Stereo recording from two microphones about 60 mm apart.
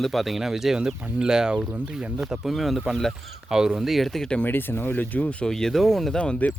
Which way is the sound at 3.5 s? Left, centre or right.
Centre.